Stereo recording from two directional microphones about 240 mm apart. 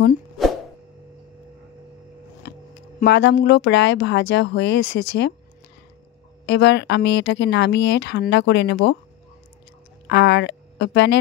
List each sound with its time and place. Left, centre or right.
2.5 s a sound: left
3.0 s speech: left
6.4 s speech: left
10.0 s a woman's voice: left